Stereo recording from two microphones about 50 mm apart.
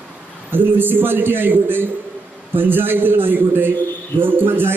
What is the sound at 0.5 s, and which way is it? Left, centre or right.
A man's voice, right.